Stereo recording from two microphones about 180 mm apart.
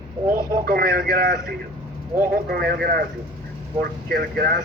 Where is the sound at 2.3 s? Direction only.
60° right (ahead or behind).